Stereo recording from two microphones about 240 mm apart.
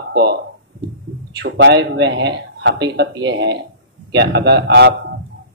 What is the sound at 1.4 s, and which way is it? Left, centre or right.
A man's voice, right.